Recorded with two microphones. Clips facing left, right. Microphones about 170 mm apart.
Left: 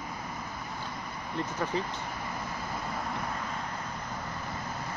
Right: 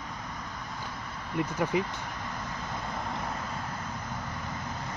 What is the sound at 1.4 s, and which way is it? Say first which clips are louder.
Speech: right 4 dB; 10° right (ahead or behind).